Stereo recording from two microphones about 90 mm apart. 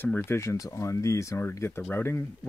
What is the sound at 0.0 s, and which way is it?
Speech, 25° left (ahead or behind).